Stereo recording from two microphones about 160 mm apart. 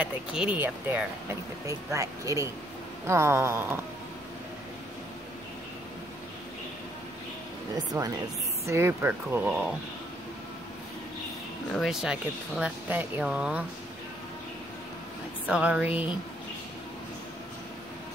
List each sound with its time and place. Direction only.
0.3 s speech: 5° right (ahead or behind)
7.9 s speech: 25° right (ahead or behind); by 9.8 s 10° right (ahead or behind)
11.7 s speech: centre (ahead or behind)
15.4 s speech: 5° right (ahead or behind)